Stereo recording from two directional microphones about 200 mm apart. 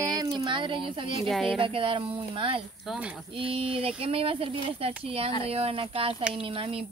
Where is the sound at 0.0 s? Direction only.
20° right (ahead or behind).